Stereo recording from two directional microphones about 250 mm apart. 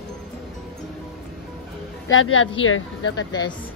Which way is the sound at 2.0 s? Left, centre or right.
Left.